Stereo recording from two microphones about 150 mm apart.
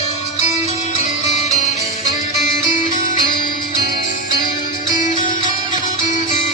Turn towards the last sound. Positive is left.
turn(degrees=60)  # may be behind; listen again after turning